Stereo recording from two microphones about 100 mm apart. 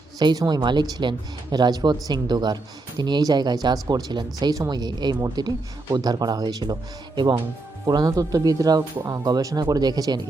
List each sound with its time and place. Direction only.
0.2 s speech: 45° right (ahead or behind)
7.9 s speech: 40° right (ahead or behind)